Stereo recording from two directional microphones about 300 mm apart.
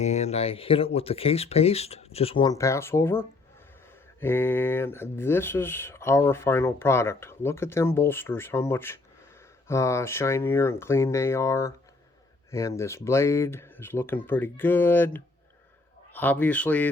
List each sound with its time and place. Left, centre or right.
0.0 s speech: left; by 16.9 s centre